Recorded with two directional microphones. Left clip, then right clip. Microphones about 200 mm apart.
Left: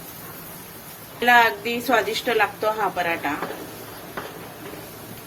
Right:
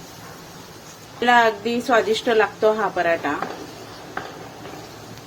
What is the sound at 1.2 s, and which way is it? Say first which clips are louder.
Speech: even; 35° right (ahead or behind).